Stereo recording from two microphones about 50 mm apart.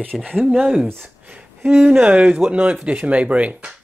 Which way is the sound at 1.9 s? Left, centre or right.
Right.